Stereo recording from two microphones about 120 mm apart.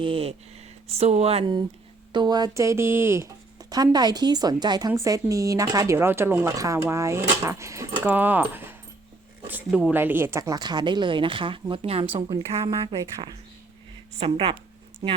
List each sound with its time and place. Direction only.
0.0 s speech: 50° right (ahead or behind)
2.1 s speech: 35° right (ahead or behind)
10.6 s speech: 35° right (ahead or behind)
12.9 s speech: 30° right (ahead or behind)
14.2 s speech: 50° right (ahead or behind)